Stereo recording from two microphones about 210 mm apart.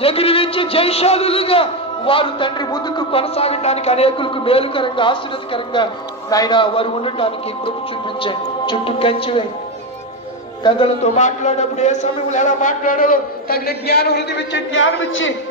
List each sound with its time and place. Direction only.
0.0 s a man's voice: 25° left (ahead or behind)
10.6 s a man's voice: 30° left (ahead or behind); by 15.3 s 65° left (ahead or behind)